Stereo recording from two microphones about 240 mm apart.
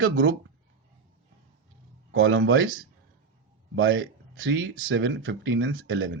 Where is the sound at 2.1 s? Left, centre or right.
Right.